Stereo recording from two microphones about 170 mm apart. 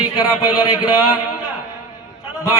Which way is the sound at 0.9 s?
10° right (ahead or behind).